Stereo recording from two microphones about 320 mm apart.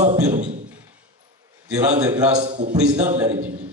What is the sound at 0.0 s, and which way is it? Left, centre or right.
Speech, centre.